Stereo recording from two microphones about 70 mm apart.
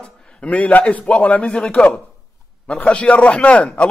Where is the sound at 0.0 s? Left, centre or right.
Centre.